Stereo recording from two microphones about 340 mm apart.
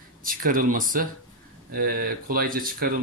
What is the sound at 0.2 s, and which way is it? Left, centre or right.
Speech, right.